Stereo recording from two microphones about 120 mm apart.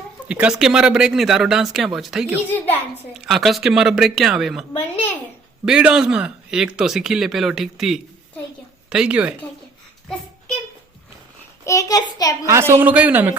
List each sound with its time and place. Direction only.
0.3 s speech: 10° right (ahead or behind)
2.5 s a child's voice: 15° left (ahead or behind)
3.2 s speech: centre (ahead or behind)
5.6 s a man's voice: 5° right (ahead or behind)
11.6 s a child's voice: 25° left (ahead or behind)
12.5 s a man's voice: 25° right (ahead or behind)